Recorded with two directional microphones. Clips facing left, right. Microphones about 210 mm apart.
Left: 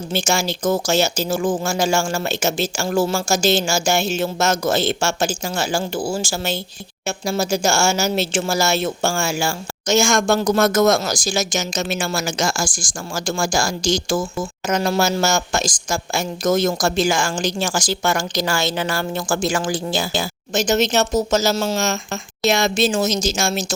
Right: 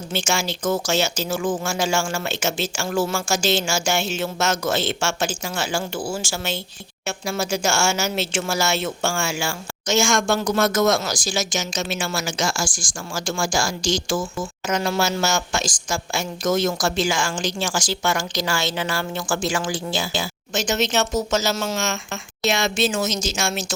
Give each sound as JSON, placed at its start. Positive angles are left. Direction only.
{"t": 0.1, "sound": "a woman's voice", "side_deg": 40}